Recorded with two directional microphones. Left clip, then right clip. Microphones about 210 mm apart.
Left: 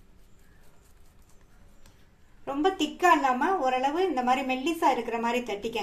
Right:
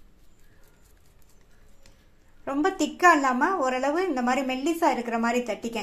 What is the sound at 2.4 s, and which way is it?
A woman's voice, 25° right (ahead or behind).